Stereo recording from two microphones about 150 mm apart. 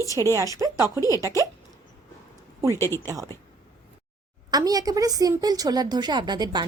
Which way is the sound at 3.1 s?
25° right (ahead or behind).